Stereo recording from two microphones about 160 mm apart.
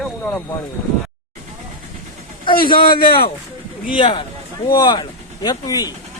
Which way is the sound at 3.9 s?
30° left (ahead or behind).